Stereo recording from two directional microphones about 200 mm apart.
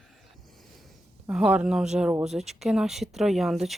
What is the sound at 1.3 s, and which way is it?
Speech, 5° right (ahead or behind).